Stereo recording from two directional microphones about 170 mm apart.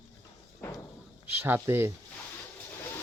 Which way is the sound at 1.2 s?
10° right (ahead or behind).